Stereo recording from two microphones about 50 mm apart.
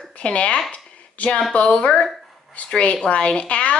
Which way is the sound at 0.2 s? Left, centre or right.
Left.